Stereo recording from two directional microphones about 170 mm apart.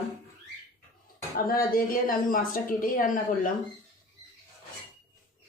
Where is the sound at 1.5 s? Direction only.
60° left (ahead or behind).